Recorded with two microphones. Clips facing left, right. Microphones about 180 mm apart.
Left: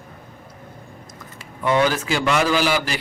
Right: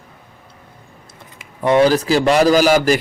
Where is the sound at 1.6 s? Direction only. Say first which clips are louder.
Right 6 dB; 30° right (ahead or behind).